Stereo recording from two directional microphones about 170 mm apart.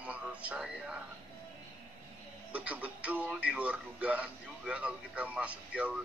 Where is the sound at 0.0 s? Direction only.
10° right (ahead or behind).